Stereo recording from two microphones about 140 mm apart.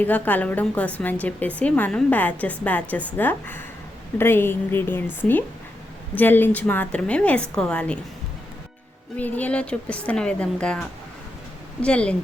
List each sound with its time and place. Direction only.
0.0 s a woman's voice: 10° left (ahead or behind)
9.1 s a woman's voice: 10° left (ahead or behind)